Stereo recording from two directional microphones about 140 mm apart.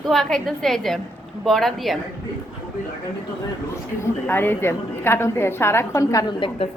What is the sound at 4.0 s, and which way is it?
A woman's voice, 15° left (ahead or behind).